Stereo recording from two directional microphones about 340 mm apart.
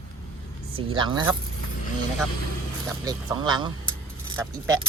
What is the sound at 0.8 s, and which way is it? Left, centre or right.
Speech, centre.